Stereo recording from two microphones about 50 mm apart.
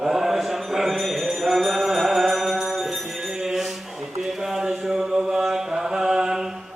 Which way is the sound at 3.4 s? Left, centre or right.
Centre.